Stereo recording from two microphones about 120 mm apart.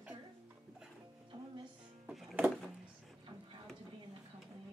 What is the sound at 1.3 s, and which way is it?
Music, 40° right (ahead or behind).